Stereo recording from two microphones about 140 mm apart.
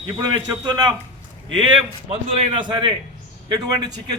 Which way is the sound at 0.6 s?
30° right (ahead or behind).